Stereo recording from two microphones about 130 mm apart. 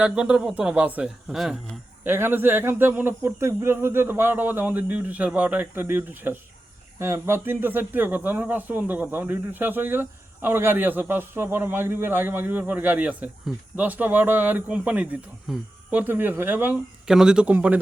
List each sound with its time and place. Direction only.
0.0 s speech: 10° right (ahead or behind)
2.0 s speech: 15° right (ahead or behind)
17.1 s speech: 5° right (ahead or behind)